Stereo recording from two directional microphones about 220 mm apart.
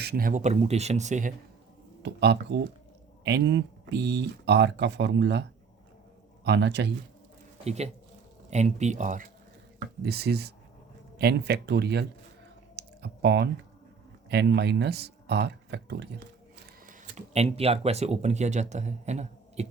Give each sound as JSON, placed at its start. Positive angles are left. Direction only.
{"t": 0.0, "sound": "speech", "side_deg": -45}
{"t": 2.0, "sound": "speech", "side_deg": -50}
{"t": 6.4, "sound": "speech", "side_deg": -50}
{"t": 7.6, "sound": "speech", "side_deg": -30}
{"t": 10.0, "sound": "speech", "side_deg": -45}
{"t": 12.7, "sound": "typing", "side_deg": -50}
{"t": 14.3, "sound": "speech", "side_deg": -50}
{"t": 16.8, "sound": "speech", "side_deg": -35}